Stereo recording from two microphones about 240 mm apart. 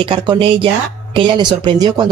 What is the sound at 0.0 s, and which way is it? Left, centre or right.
Speech, right.